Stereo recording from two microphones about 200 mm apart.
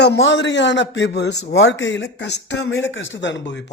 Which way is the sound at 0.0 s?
60° left (ahead or behind).